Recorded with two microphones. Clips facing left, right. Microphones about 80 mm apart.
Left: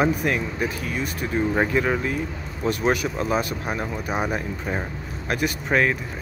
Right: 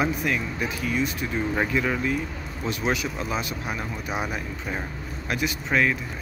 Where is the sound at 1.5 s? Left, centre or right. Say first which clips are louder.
Left 2 dB; left.